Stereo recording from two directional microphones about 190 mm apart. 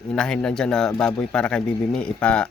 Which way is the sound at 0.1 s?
5° left (ahead or behind).